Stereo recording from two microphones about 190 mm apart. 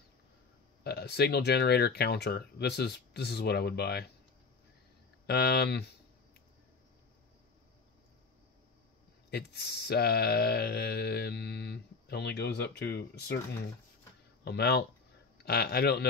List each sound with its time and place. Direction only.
0.8 s speech: 60° left (ahead or behind)
5.2 s speech: 60° left (ahead or behind)
9.3 s speech: 60° left (ahead or behind)
14.4 s speech: 60° left (ahead or behind)